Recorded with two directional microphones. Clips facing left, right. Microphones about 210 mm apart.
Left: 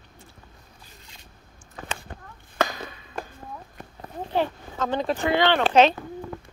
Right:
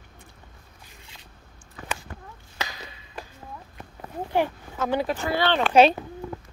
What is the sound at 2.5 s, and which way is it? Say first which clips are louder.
Chopping: left 10 dB; 55° left (ahead or behind).